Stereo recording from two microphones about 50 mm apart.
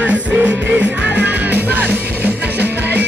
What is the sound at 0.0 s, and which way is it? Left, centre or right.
Music, right.